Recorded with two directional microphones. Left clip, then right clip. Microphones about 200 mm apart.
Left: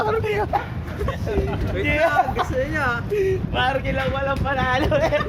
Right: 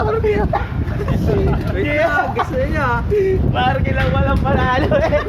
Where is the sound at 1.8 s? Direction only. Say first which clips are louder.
Right 2 dB; 30° left (ahead or behind).